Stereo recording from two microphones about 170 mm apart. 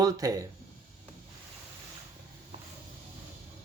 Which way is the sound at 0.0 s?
20° right (ahead or behind).